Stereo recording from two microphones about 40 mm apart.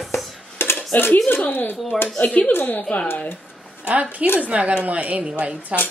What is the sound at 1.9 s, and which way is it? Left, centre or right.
Speech, centre.